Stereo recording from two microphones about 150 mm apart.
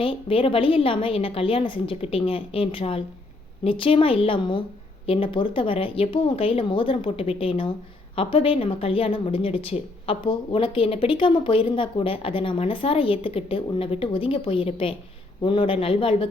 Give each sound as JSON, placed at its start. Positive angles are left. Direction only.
{"t": 0.0, "sound": "speech", "side_deg": 40}